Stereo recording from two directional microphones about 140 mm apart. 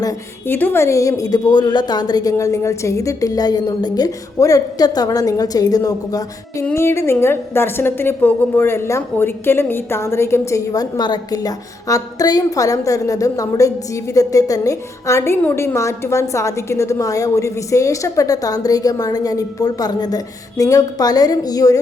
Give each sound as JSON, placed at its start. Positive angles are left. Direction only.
{"t": 0.0, "sound": "a woman's voice", "side_deg": 20}